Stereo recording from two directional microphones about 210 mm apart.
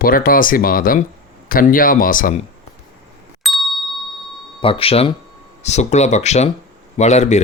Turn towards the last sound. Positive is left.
turn(degrees=30)  # may be behind; listen again after turning